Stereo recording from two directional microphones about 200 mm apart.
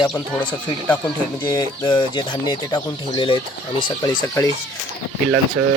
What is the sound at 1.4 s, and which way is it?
Speech, 25° left (ahead or behind).